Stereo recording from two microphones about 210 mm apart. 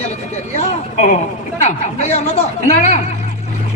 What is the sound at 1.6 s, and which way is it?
Speech, 30° left (ahead or behind).